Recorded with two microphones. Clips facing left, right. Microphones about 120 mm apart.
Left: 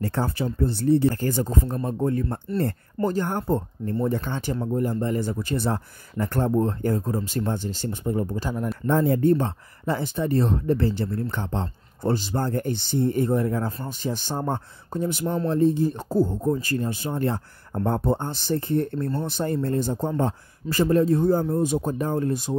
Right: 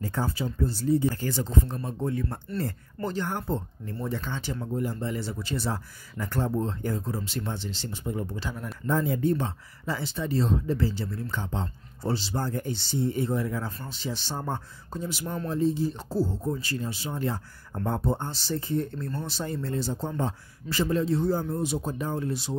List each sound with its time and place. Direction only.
0.0 s speech: 65° left (ahead or behind)
1.2 s speech: 45° left (ahead or behind)
8.8 s speech: 60° left (ahead or behind)